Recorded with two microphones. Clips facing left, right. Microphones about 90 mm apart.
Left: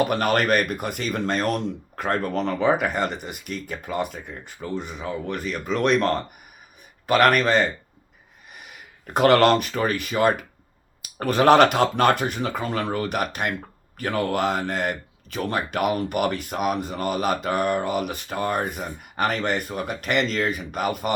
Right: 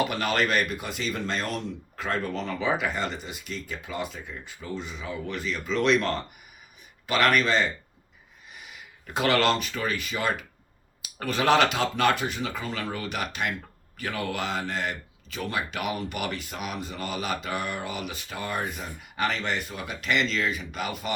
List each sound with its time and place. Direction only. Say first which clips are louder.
0.0 s speech: left 5 dB; 50° left (ahead or behind)
8.5 s a sound: left 2 dB; 50° left (ahead or behind)
9.1 s speech: left 7 dB; 50° left (ahead or behind)